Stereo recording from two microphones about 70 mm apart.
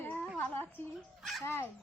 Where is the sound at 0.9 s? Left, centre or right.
Centre.